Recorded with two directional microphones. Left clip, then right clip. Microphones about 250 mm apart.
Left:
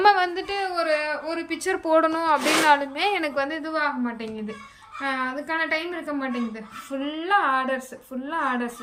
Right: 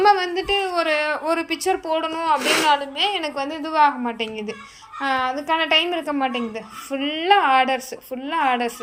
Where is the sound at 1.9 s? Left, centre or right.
Centre.